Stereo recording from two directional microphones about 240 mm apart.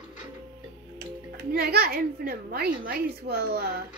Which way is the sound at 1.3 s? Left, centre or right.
Right.